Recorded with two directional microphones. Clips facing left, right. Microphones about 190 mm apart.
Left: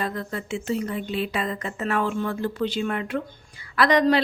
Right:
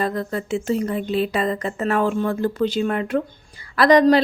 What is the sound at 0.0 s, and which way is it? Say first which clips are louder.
A woman's voice: right 5 dB; 40° right (ahead or behind).